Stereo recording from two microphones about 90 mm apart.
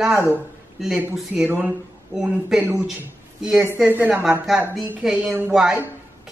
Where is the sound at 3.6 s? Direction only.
25° right (ahead or behind).